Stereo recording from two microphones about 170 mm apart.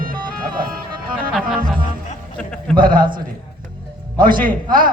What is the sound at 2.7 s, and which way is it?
Speech, 55° right (ahead or behind).